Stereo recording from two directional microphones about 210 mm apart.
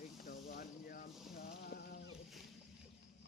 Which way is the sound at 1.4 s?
50° left (ahead or behind).